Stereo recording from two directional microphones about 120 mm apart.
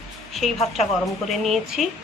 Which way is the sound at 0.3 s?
Centre (ahead or behind).